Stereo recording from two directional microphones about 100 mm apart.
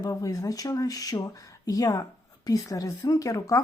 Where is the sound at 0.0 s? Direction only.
35° left (ahead or behind).